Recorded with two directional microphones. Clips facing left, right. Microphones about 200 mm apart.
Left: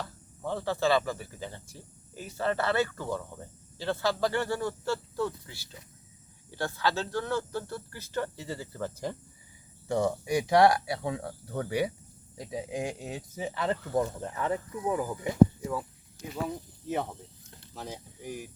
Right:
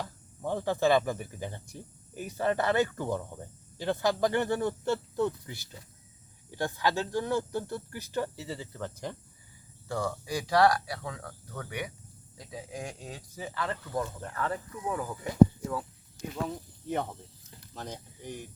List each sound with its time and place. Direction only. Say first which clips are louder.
0.0 s speech: right 1 dB; 15° right (ahead or behind)
8.4 s speech: left 2 dB; 5° left (ahead or behind)
9.9 s speech: left 5 dB; 20° left (ahead or behind)